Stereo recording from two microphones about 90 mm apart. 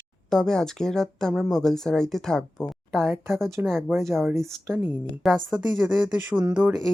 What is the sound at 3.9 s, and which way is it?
Speech, 30° right (ahead or behind).